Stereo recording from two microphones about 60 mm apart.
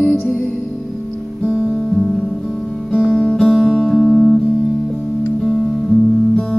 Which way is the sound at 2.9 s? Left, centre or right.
Centre.